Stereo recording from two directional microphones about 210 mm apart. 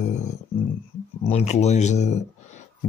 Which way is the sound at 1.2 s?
30° left (ahead or behind).